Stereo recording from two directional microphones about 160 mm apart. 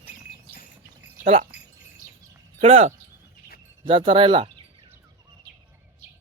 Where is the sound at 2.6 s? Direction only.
40° right (ahead or behind).